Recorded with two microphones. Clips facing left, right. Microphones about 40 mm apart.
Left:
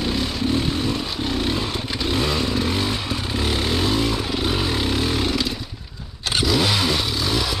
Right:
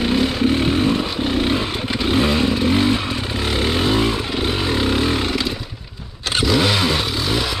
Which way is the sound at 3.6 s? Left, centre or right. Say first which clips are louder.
Right 5 dB; centre.